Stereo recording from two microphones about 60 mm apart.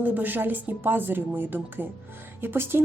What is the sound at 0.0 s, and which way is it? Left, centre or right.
A woman's voice, right.